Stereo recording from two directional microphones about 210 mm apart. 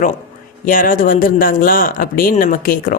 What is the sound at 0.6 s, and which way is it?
Speech, 40° left (ahead or behind).